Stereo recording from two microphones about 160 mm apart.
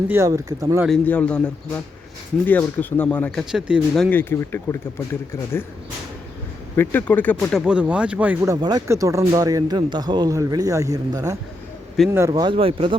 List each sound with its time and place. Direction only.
0.1 s speech: 20° right (ahead or behind)
0.9 s a man's voice: 10° left (ahead or behind)
4.2 s a man's voice: 15° left (ahead or behind)
6.7 s speech: 10° left (ahead or behind); by 11.3 s 20° right (ahead or behind)
12.0 s speech: centre (ahead or behind)
12.3 s speech: 30° right (ahead or behind)